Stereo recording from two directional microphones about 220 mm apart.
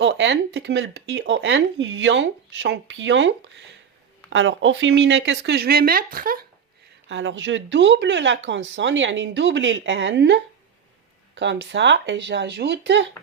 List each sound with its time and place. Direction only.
0.0 s speech: 50° right (ahead or behind)
7.1 s speech: 60° right (ahead or behind)